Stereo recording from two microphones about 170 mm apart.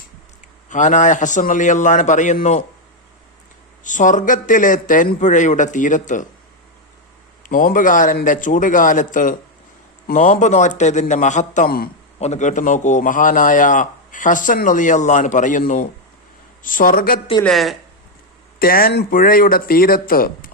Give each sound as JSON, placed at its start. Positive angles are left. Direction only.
{"t": 0.7, "sound": "a man's voice", "side_deg": 45}
{"t": 3.8, "sound": "a man's voice", "side_deg": 50}
{"t": 7.4, "sound": "a man's voice", "side_deg": 55}
{"t": 12.2, "sound": "a man's voice", "side_deg": 45}
{"t": 17.4, "sound": "a woman's voice", "side_deg": 0}
{"t": 18.6, "sound": "speech", "side_deg": 60}